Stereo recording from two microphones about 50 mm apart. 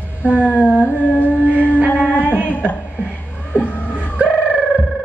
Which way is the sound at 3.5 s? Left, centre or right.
Left.